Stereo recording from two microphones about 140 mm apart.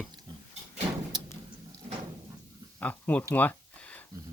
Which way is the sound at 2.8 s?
10° left (ahead or behind).